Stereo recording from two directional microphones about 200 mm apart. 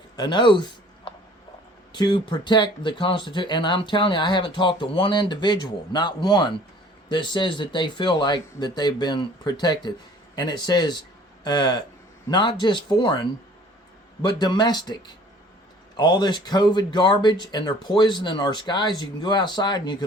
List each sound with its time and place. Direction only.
0.2 s speech: 20° left (ahead or behind)
14.2 s speech: 20° left (ahead or behind)